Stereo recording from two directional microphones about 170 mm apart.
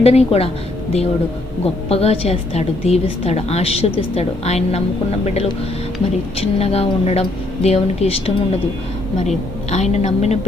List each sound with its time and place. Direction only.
0.0 s a woman's voice: 35° left (ahead or behind)
1.9 s a woman's voice: 35° left (ahead or behind)